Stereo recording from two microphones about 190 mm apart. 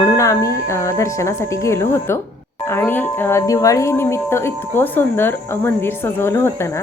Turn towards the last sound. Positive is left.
turn(degrees=15)  # may be behind; listen again after turning